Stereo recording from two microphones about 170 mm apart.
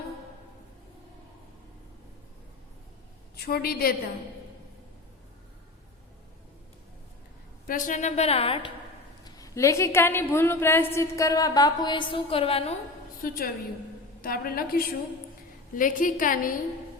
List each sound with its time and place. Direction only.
3.3 s a woman's voice: 65° left (ahead or behind)
7.7 s a woman's voice: 45° left (ahead or behind); by 8.7 s 30° left (ahead or behind)
9.2 s a woman's voice: 20° left (ahead or behind); by 12.7 s 35° left (ahead or behind)
13.2 s a woman's voice: 60° left (ahead or behind)